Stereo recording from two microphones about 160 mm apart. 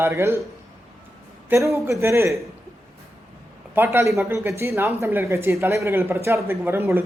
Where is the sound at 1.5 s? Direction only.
20° right (ahead or behind).